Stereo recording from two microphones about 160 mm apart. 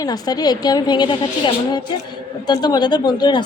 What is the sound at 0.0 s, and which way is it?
A woman's voice, 25° left (ahead or behind).